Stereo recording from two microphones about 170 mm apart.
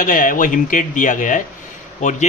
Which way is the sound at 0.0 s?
55° left (ahead or behind).